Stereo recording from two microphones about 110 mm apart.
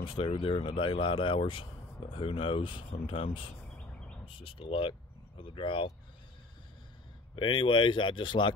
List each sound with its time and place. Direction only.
0.0 s speech: 55° left (ahead or behind)
3.7 s bird: 10° left (ahead or behind)
4.4 s speech: 55° left (ahead or behind)
7.3 s speech: 50° left (ahead or behind)